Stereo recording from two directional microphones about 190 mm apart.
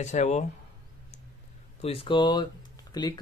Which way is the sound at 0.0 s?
40° left (ahead or behind).